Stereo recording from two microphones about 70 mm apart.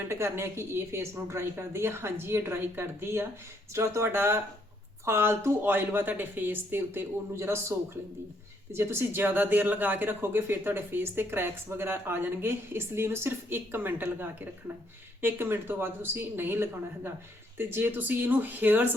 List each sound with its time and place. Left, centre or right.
0.1 s speech: right
8.7 s speech: right